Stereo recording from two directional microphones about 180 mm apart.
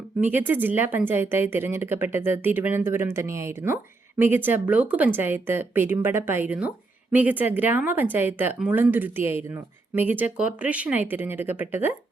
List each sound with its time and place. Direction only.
0.2 s a woman's voice: 10° right (ahead or behind)